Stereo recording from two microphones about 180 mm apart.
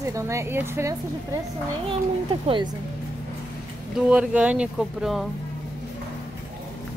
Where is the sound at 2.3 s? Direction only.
30° right (ahead or behind).